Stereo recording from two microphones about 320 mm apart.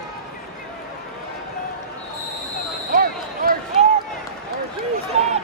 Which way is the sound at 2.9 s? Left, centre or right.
Right.